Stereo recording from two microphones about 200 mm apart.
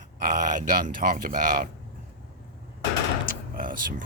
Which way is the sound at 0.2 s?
45° right (ahead or behind).